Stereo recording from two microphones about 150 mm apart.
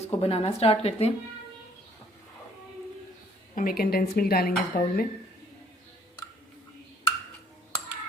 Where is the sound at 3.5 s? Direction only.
75° left (ahead or behind).